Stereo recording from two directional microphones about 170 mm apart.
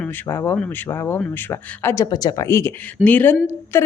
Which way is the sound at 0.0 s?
10° left (ahead or behind).